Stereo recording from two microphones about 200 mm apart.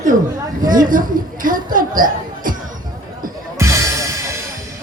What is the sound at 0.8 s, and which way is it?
Music, 45° right (ahead or behind).